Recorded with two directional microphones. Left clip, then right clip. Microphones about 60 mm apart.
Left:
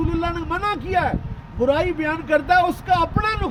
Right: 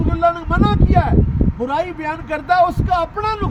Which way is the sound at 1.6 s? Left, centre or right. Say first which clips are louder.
Left 2 dB; right.